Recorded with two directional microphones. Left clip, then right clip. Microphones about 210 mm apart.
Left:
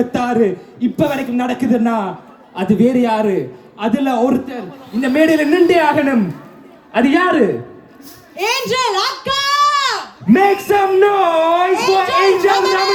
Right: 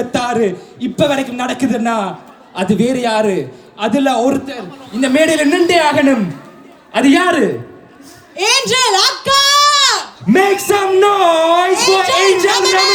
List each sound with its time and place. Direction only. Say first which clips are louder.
0.1 s a man's voice: even; 30° right (ahead or behind)
6.9 s a man's voice: right 2 dB; 45° right (ahead or behind)